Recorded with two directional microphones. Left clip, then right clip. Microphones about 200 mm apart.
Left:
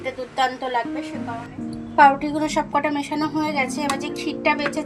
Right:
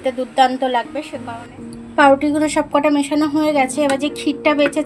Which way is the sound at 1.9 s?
45° right (ahead or behind).